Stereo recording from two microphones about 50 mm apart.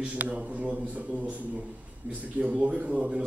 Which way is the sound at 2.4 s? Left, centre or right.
Right.